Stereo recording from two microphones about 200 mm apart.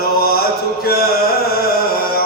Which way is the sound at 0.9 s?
50° left (ahead or behind).